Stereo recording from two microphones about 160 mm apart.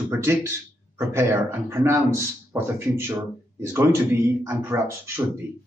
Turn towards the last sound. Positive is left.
turn(degrees=-15)  # may be behind; listen again after turning